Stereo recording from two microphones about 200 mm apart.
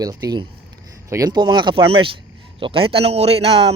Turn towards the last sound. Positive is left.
turn(degrees=-30)  # may be behind; listen again after turning